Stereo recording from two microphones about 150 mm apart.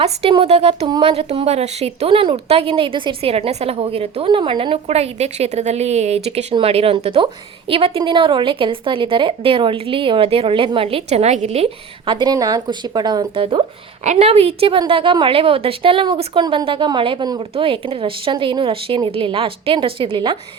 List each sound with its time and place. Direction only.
0.0 s speech: 35° right (ahead or behind)
4.9 s a woman's voice: 45° right (ahead or behind)
14.0 s speech: 45° right (ahead or behind)